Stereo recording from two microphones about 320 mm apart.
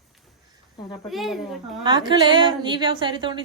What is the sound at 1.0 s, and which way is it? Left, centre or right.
Speech, centre.